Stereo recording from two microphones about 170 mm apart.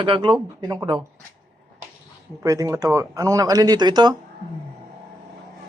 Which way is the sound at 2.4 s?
20° right (ahead or behind).